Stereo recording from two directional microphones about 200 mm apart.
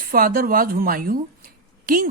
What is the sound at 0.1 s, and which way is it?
Speech, 45° right (ahead or behind).